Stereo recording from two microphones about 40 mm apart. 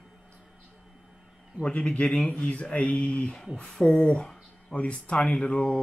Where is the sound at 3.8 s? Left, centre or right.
Left.